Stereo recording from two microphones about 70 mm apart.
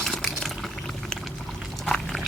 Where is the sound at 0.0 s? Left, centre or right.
Centre.